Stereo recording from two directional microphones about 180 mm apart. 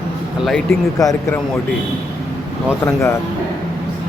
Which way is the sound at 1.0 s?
20° left (ahead or behind).